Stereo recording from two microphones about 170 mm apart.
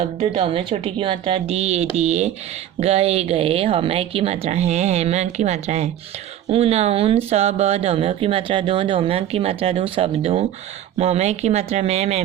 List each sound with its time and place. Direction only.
0.0 s speech: 35° right (ahead or behind)